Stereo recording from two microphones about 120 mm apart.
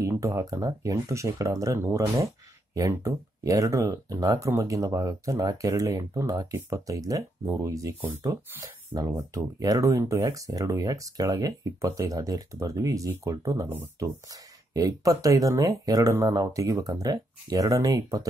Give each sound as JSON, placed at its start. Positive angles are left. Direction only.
{"t": 0.0, "sound": "speech", "side_deg": -25}
{"t": 8.9, "sound": "speech", "side_deg": -30}